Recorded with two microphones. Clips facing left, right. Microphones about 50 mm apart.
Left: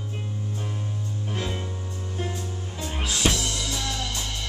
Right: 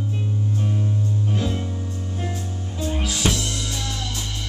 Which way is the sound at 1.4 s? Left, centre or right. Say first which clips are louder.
Right 5 dB; centre.